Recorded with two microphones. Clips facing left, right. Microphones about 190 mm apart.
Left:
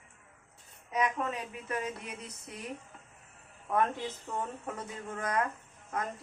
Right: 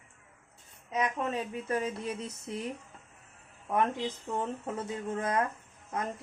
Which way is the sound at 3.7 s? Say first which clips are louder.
Right 1 dB; 15° right (ahead or behind).